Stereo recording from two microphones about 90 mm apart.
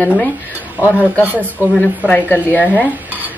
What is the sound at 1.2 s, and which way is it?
Speech, 20° right (ahead or behind).